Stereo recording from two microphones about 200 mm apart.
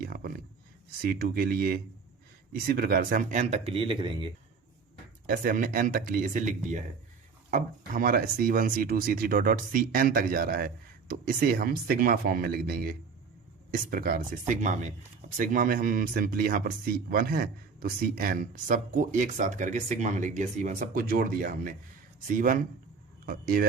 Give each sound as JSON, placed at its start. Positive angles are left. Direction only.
{"t": 0.0, "sound": "a sound", "side_deg": -45}
{"t": 1.0, "sound": "speech", "side_deg": -50}
{"t": 5.2, "sound": "speech", "side_deg": -45}